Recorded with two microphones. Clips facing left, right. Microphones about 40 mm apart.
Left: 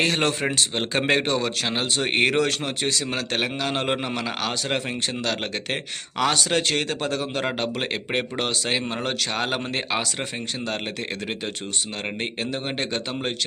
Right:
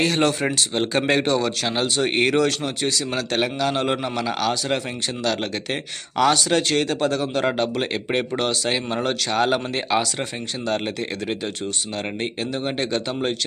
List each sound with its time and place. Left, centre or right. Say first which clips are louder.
0.0 s speech: right 2 dB; left
12.2 s speech: right 2 dB; centre